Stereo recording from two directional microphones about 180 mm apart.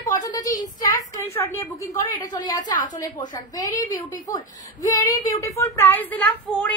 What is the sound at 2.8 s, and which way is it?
Speech, 45° left (ahead or behind).